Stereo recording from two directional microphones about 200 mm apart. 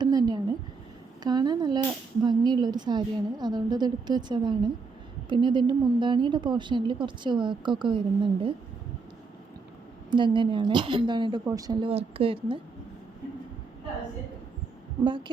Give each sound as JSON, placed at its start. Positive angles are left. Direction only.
{"t": 0.0, "sound": "a woman's voice", "side_deg": -20}
{"t": 10.1, "sound": "a woman's voice", "side_deg": -25}